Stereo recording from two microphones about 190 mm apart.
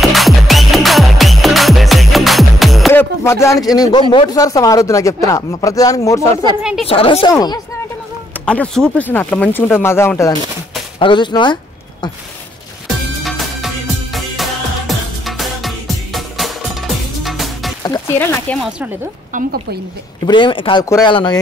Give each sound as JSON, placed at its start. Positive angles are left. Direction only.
{"t": 0.0, "sound": "music", "side_deg": 0}
{"t": 2.9, "sound": "speech", "side_deg": 15}
{"t": 6.6, "sound": "a woman's voice", "side_deg": -5}
{"t": 6.9, "sound": "speech", "side_deg": 30}
{"t": 8.5, "sound": "speech", "side_deg": 5}
{"t": 11.0, "sound": "speech", "side_deg": 25}
{"t": 12.8, "sound": "music", "side_deg": 0}
{"t": 17.8, "sound": "speech", "side_deg": 15}
{"t": 18.6, "sound": "a woman's voice", "side_deg": -5}
{"t": 19.3, "sound": "speech", "side_deg": -50}
{"t": 20.2, "sound": "speech", "side_deg": 25}